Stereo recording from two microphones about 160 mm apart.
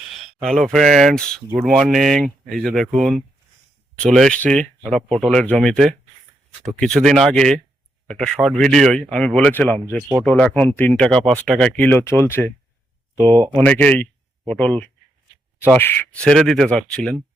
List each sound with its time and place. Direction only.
0.3 s speech: centre (ahead or behind)
13.1 s speech: 30° right (ahead or behind)
13.6 s speech: 10° left (ahead or behind)